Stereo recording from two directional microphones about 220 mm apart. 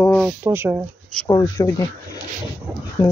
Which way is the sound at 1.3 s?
15° left (ahead or behind).